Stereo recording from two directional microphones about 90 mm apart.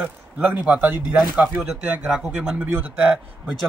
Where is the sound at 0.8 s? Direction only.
20° right (ahead or behind).